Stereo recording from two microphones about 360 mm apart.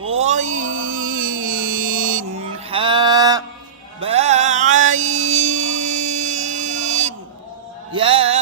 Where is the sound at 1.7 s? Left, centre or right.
Right.